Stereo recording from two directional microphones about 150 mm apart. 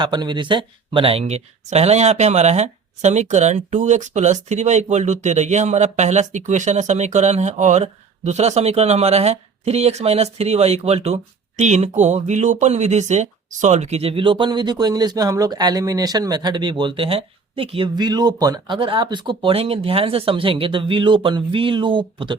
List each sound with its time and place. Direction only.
0.0 s speech: 30° right (ahead or behind)